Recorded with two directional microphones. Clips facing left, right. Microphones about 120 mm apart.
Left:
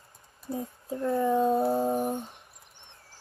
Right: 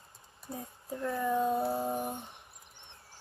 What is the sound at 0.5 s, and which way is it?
Speech, 25° left (ahead or behind).